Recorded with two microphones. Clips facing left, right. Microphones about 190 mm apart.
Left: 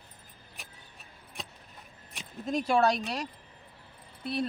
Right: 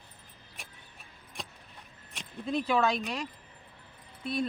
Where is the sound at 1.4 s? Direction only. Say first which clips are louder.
Even; centre (ahead or behind).